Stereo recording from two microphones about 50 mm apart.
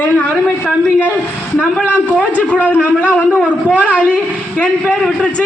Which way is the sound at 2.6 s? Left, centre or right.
Right.